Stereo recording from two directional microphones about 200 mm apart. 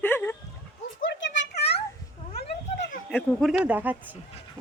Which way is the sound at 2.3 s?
45° left (ahead or behind).